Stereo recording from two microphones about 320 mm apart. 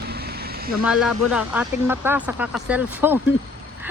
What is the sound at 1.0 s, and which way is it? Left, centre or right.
Speech, centre.